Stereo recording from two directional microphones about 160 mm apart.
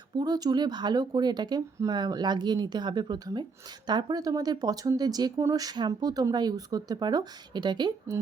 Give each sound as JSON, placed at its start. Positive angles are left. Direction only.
{"t": 0.2, "sound": "speech", "side_deg": -25}